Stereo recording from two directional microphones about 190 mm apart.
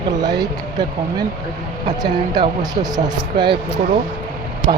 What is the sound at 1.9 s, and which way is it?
Speech, 20° right (ahead or behind).